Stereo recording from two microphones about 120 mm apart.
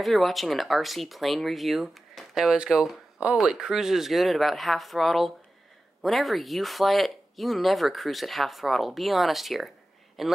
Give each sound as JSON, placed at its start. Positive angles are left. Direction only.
{"t": 0.0, "sound": "speech", "side_deg": 0}